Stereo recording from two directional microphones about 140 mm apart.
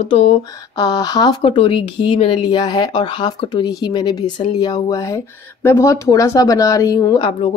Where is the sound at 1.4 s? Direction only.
40° left (ahead or behind).